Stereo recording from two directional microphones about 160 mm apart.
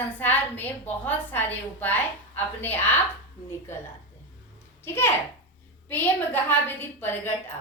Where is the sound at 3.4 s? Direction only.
35° left (ahead or behind).